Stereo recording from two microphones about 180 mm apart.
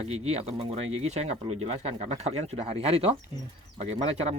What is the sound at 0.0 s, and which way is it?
Speech, 35° right (ahead or behind).